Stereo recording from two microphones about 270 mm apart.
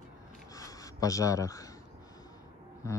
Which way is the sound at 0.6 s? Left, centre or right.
Centre.